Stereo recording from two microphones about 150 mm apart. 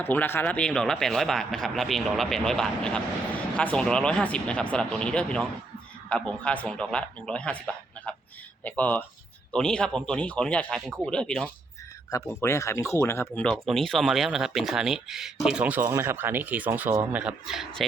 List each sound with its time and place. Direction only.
0.0 s speech: 15° left (ahead or behind)
8.1 s a sound: 10° left (ahead or behind)
8.6 s speech: 10° left (ahead or behind)
12.3 s speech: 20° left (ahead or behind)
13.4 s speech: 5° left (ahead or behind)